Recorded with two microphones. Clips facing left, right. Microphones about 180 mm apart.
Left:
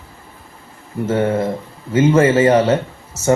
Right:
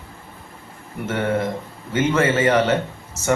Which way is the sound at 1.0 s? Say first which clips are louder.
Left 5 dB; 30° left (ahead or behind).